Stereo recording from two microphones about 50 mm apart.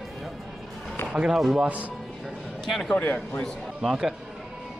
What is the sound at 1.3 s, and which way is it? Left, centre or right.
Speech, centre.